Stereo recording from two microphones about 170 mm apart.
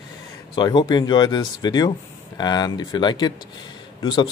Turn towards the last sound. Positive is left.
turn(degrees=25)  # may be behind; listen again after turning